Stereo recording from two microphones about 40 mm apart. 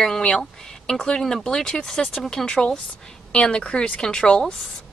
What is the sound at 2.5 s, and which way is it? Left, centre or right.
Speech, left.